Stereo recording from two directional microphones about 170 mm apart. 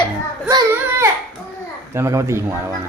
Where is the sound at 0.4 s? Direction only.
15° right (ahead or behind).